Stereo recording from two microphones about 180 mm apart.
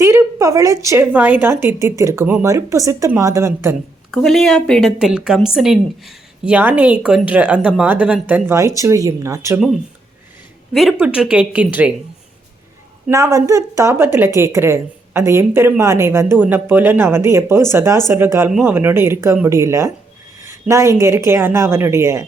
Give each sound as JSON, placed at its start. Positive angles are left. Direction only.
{"t": 0.0, "sound": "a woman's voice", "side_deg": -15}
{"t": 4.1, "sound": "a woman's voice", "side_deg": 0}
{"t": 10.8, "sound": "a woman's voice", "side_deg": 0}
{"t": 13.1, "sound": "a woman's voice", "side_deg": -15}